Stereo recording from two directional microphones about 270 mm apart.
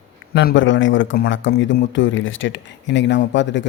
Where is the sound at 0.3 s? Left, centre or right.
Left.